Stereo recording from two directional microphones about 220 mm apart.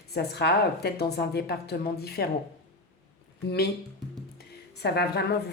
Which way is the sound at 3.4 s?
45° left (ahead or behind).